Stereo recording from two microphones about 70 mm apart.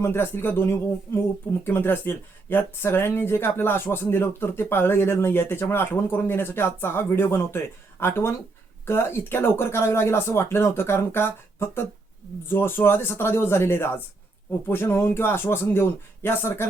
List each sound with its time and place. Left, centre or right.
0.0 s speech: left